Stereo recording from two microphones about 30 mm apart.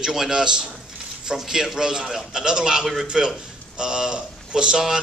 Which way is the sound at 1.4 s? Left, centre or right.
Centre.